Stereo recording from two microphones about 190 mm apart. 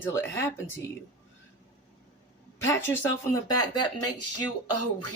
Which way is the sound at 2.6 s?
15° left (ahead or behind).